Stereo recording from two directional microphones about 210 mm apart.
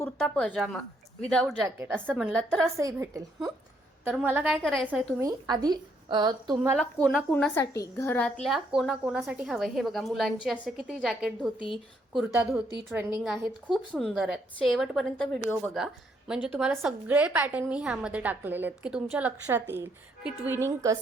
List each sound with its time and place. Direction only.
0.0 s a woman's voice: 5° left (ahead or behind)
1.6 s speech: 10° right (ahead or behind)
2.3 s a woman's voice: 5° left (ahead or behind)
2.7 s a woman's voice: 15° right (ahead or behind); by 4.9 s centre (ahead or behind)
5.2 s speech: 20° right (ahead or behind)
6.7 s a woman's voice: 5° left (ahead or behind)
7.6 s a woman's voice: 15° left (ahead or behind); by 13.1 s 10° right (ahead or behind)
13.2 s a woman's voice: centre (ahead or behind)